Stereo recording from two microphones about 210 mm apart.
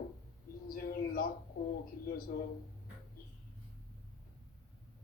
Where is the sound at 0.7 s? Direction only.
45° left (ahead or behind).